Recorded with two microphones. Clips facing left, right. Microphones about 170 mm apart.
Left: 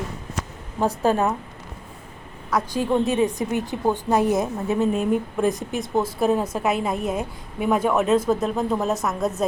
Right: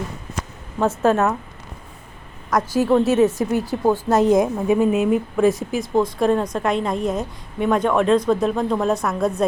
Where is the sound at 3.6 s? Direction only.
20° left (ahead or behind).